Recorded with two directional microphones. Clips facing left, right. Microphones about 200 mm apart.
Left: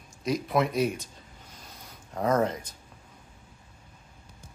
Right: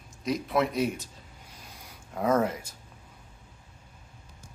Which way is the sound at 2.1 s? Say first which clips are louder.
Even; 5° right (ahead or behind).